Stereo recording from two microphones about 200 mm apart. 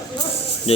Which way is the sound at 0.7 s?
30° left (ahead or behind).